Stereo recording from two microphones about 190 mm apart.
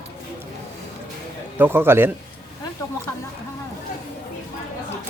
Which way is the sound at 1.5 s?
10° right (ahead or behind).